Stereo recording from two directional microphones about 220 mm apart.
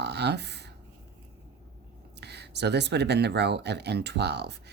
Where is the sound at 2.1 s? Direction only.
50° right (ahead or behind).